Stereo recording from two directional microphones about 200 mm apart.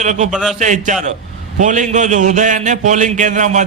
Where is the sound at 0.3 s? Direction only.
Centre (ahead or behind).